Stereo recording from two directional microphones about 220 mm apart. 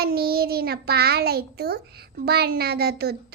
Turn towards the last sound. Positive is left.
turn(degrees=-45)  # may be behind; listen again after turning